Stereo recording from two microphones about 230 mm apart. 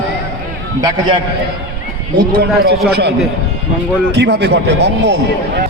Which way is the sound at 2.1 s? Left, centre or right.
Right.